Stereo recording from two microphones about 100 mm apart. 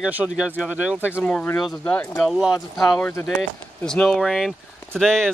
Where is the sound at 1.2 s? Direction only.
10° left (ahead or behind).